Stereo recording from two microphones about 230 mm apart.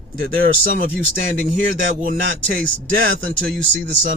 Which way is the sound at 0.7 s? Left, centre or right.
Right.